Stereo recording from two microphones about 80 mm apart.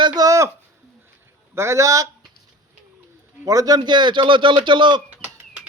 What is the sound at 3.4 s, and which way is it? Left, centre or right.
Speech, right.